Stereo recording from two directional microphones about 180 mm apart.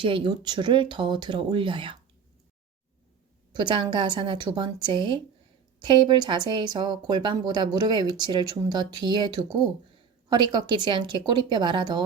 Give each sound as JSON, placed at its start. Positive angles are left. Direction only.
{"t": 0.0, "sound": "speech", "side_deg": -25}
{"t": 3.5, "sound": "speech", "side_deg": -25}